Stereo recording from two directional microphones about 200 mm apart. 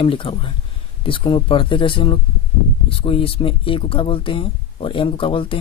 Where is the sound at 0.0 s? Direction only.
25° left (ahead or behind).